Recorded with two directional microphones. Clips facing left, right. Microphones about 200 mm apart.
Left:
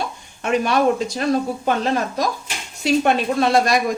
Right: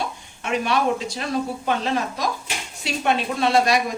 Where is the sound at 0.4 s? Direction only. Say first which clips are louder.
Left 4 dB; 45° left (ahead or behind).